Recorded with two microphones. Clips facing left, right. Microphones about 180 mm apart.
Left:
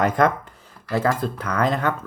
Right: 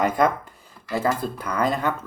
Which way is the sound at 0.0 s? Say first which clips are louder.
Left 1 dB; 5° right (ahead or behind).